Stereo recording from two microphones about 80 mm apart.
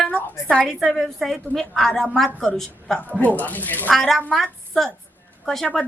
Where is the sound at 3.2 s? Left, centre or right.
Left.